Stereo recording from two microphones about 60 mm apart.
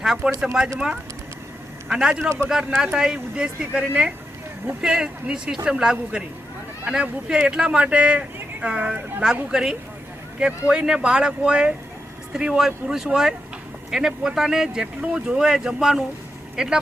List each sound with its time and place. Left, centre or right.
0.0 s speech: centre
1.9 s speech: centre
4.8 s speech: centre